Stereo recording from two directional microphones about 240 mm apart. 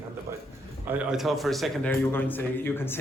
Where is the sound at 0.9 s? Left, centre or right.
Centre.